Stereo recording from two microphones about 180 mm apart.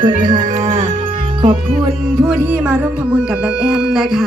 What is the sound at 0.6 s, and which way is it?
Music, 40° right (ahead or behind).